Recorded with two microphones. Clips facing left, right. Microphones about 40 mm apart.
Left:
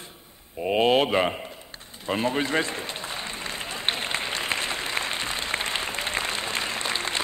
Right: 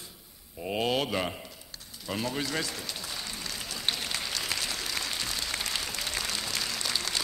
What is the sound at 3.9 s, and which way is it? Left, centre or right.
Applause, left.